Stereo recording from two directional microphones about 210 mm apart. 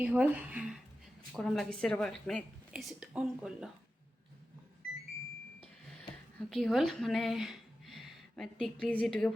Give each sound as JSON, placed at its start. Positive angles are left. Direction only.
{"t": 0.0, "sound": "a woman's voice", "side_deg": -5}
{"t": 6.5, "sound": "speech", "side_deg": 0}